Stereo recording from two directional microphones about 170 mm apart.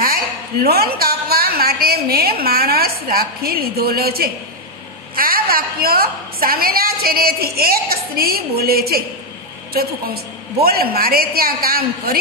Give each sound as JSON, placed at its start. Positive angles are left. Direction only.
{"t": 0.0, "sound": "a woman's voice", "side_deg": -60}